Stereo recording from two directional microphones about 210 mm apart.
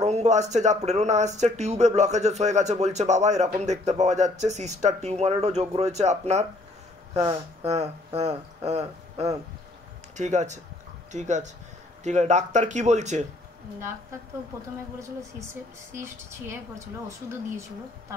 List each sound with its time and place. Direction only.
0.0 s speech: 35° right (ahead or behind)
7.6 s speech: 30° right (ahead or behind)
15.9 s a woman's voice: 10° right (ahead or behind)